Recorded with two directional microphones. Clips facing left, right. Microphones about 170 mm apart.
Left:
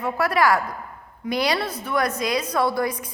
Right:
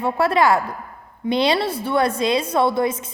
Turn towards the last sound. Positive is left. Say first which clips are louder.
# right 4 dB
turn(degrees=-25)  # may be behind; listen again after turning